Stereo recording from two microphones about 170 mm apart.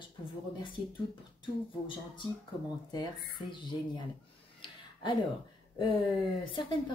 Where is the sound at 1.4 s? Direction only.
30° left (ahead or behind).